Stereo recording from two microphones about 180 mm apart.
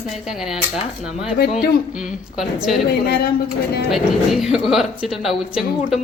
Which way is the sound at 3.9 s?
Centre (ahead or behind).